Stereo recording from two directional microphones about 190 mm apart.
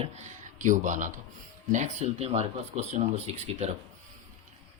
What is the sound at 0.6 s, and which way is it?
Speech, 40° right (ahead or behind).